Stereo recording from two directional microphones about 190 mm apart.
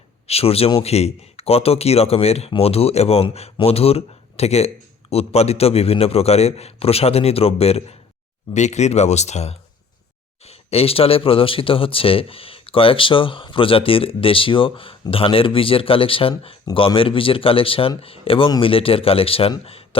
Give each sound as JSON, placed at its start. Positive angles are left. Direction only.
{"t": 0.3, "sound": "speech", "side_deg": 30}